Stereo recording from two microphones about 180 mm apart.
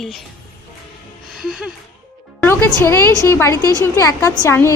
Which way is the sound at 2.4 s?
15° left (ahead or behind).